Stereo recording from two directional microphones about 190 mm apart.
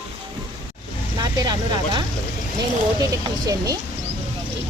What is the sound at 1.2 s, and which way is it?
Speech, 20° right (ahead or behind).